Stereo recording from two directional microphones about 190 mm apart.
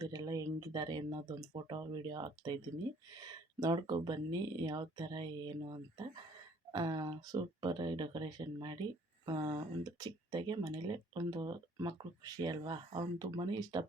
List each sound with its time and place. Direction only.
0.0 s speech: 20° right (ahead or behind)